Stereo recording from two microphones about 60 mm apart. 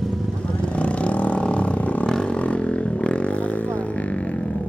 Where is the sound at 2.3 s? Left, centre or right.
Centre.